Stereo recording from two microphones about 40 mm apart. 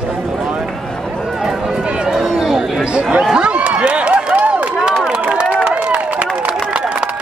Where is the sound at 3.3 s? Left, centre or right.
Right.